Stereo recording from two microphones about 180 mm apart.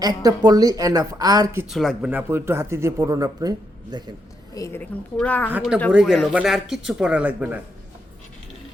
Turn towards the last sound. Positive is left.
turn(degrees=-10)  # may be behind; listen again after turning